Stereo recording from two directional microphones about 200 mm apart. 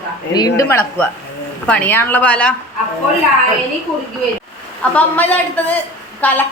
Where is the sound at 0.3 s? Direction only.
20° left (ahead or behind).